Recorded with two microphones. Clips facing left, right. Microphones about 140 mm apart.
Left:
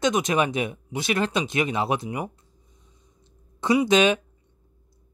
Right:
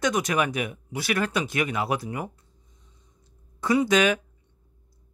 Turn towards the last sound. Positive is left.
turn(degrees=20)  # may be behind; listen again after turning